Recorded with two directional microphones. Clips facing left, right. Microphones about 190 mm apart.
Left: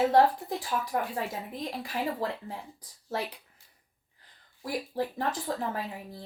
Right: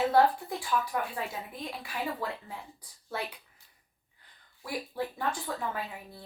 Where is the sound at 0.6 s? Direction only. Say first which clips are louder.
Right 1 dB; 40° left (ahead or behind).